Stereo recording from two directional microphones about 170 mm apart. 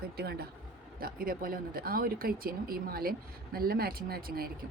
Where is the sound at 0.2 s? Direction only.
65° right (ahead or behind).